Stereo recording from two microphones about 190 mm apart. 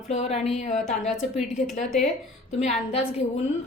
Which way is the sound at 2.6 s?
35° left (ahead or behind).